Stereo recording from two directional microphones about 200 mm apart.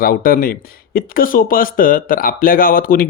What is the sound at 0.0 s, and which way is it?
Speech, 45° left (ahead or behind).